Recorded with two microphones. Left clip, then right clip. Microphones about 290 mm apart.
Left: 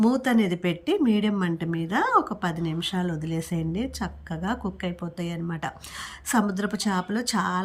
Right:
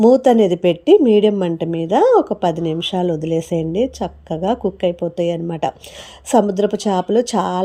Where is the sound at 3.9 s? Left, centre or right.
Right.